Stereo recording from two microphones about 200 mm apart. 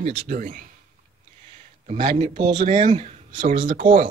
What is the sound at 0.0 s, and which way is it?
Speech, 30° right (ahead or behind).